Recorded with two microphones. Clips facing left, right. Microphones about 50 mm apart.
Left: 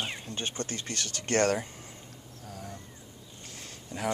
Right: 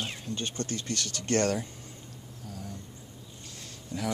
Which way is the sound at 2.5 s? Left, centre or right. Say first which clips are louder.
Even; left.